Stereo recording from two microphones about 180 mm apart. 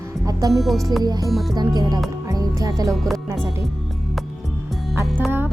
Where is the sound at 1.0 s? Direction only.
20° right (ahead or behind).